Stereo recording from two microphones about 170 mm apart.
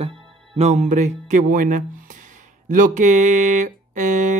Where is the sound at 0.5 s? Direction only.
45° right (ahead or behind).